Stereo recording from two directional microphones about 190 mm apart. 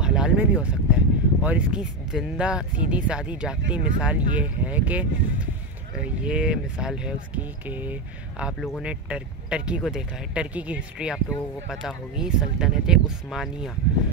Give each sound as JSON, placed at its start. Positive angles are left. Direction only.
{"t": 0.0, "sound": "speech", "side_deg": -5}